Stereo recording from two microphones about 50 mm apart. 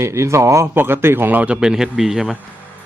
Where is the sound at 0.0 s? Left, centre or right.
Right.